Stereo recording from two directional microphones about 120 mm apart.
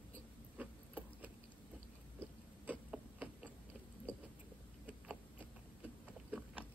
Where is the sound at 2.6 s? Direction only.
10° right (ahead or behind).